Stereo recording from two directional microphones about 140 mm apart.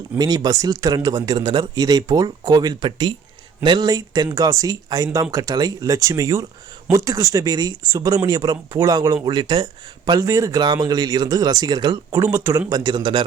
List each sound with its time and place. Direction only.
0.2 s speech: 25° right (ahead or behind)